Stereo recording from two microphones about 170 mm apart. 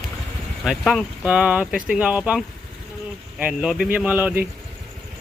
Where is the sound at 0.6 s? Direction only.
Centre (ahead or behind).